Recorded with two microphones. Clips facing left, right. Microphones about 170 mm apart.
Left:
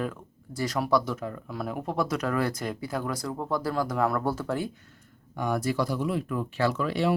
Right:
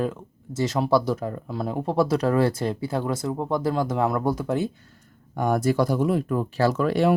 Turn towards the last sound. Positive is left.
turn(degrees=-50)  # may be behind; listen again after turning